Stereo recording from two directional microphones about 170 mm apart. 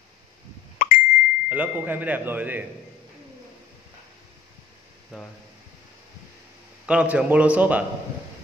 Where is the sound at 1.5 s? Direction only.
10° right (ahead or behind).